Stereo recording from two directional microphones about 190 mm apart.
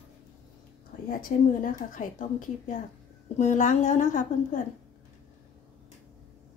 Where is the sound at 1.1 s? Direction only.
45° left (ahead or behind).